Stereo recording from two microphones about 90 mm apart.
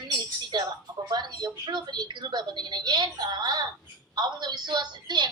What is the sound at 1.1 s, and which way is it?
A woman's voice, 50° right (ahead or behind).